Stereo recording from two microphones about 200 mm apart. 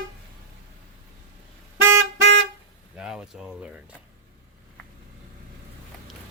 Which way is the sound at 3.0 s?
5° right (ahead or behind).